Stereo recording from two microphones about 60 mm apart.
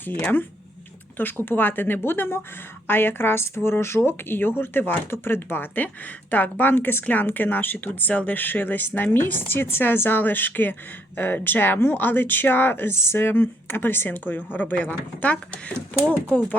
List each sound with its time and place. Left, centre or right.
1.2 s speech: left